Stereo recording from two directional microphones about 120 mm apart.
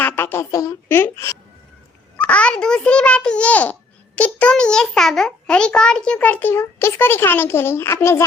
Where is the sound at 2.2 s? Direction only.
10° left (ahead or behind).